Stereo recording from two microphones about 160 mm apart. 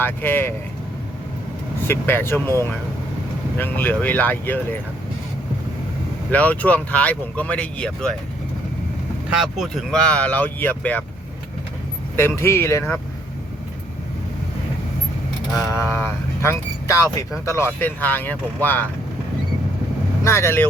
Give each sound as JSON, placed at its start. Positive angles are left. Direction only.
{"t": 0.0, "sound": "speech", "side_deg": 10}
{"t": 1.9, "sound": "speech", "side_deg": 15}
{"t": 6.3, "sound": "speech", "side_deg": 10}
{"t": 9.3, "sound": "speech", "side_deg": 0}
{"t": 12.1, "sound": "speech", "side_deg": 15}
{"t": 15.5, "sound": "speech", "side_deg": 15}
{"t": 20.2, "sound": "speech", "side_deg": 15}